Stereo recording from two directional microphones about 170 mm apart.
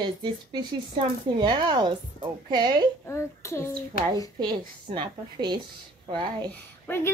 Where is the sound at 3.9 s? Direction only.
60° left (ahead or behind).